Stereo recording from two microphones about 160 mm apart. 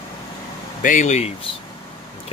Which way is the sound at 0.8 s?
50° left (ahead or behind).